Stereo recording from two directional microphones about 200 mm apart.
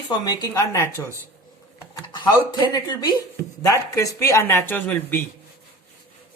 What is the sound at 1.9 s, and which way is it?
Speech, 20° left (ahead or behind).